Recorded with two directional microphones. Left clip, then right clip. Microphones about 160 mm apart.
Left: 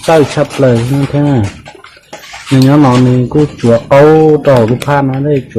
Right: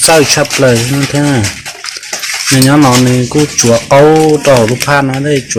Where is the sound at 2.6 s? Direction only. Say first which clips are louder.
Even; 25° right (ahead or behind).